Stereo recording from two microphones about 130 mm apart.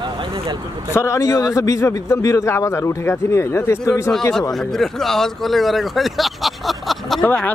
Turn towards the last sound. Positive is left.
turn(degrees=15)  # may be behind; listen again after turning